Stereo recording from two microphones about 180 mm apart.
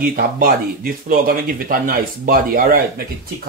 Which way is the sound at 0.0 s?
50° right (ahead or behind).